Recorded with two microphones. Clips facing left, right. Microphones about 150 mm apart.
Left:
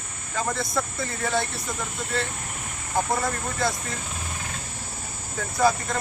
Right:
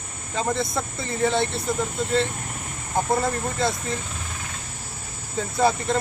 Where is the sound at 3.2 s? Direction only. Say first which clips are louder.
Right 2 dB; 25° right (ahead or behind).